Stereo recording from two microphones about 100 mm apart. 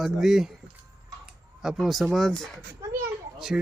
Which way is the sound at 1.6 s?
Centre (ahead or behind).